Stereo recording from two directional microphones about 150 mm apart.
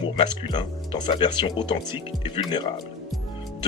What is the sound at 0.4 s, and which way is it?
Speech, 30° left (ahead or behind).